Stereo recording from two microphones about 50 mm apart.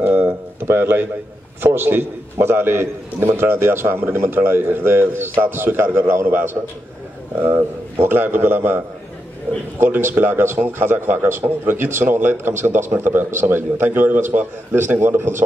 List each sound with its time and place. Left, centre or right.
0.0 s a sound: right
1.6 s a man's voice: right
14.7 s a man's voice: right